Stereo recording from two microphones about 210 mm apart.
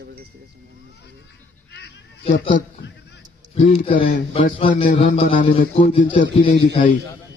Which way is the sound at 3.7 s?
25° left (ahead or behind).